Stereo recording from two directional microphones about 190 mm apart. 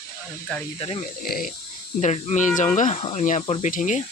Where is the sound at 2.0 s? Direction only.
40° left (ahead or behind).